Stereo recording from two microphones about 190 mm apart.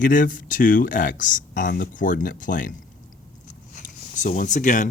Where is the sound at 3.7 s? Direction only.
40° left (ahead or behind).